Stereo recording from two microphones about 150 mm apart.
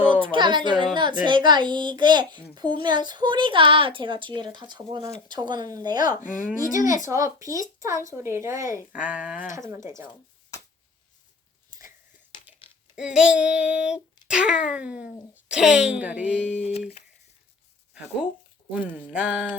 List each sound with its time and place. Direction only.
0.2 s a child's voice: 30° right (ahead or behind)
6.1 s a child's voice: 65° left (ahead or behind)
7.1 s speech: 20° right (ahead or behind)
8.9 s child singing: 10° right (ahead or behind)
9.6 s speech: 20° right (ahead or behind)
10.0 s a sound: 30° left (ahead or behind)
13.0 s child singing: 5° right (ahead or behind)
16.5 s speech: 45° left (ahead or behind)
18.9 s child singing: 10° right (ahead or behind)